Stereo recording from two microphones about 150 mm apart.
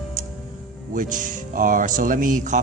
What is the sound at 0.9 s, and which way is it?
Speech, 60° right (ahead or behind).